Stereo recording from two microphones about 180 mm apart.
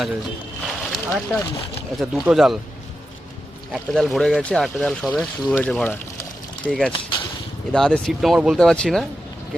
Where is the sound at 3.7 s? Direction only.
Centre (ahead or behind).